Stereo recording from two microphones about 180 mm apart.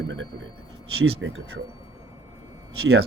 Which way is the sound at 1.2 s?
90° right.